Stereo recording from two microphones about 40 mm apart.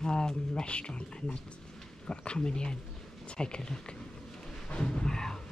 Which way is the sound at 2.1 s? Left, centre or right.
Left.